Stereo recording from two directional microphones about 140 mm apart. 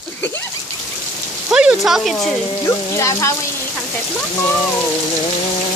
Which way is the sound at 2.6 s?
20° left (ahead or behind).